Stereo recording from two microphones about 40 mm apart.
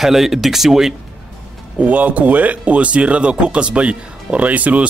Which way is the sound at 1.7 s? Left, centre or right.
Right.